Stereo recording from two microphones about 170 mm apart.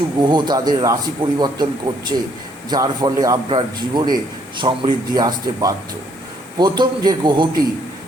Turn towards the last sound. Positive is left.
turn(degrees=-25)  # may be behind; listen again after turning